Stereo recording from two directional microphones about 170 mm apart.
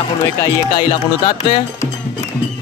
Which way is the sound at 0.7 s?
30° left (ahead or behind).